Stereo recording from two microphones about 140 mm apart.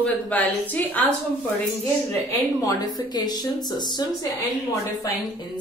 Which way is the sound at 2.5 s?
25° left (ahead or behind).